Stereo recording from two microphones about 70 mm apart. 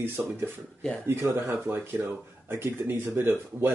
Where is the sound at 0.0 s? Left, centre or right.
Right.